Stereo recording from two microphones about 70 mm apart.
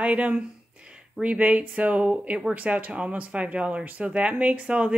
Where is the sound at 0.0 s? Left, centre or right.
Centre.